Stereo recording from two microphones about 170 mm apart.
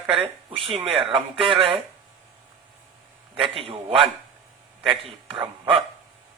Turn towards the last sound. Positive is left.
turn(degrees=-30)  # may be behind; listen again after turning